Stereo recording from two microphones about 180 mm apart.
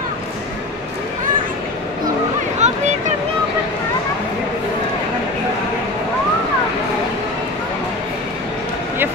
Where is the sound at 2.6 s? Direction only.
40° right (ahead or behind).